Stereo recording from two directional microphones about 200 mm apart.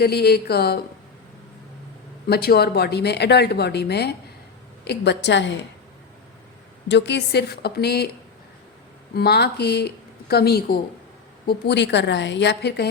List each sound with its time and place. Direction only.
0.0 s speech: 55° left (ahead or behind)
2.2 s a woman's voice: 50° left (ahead or behind)
6.8 s a woman's voice: 60° left (ahead or behind)
9.1 s a woman's voice: 55° left (ahead or behind)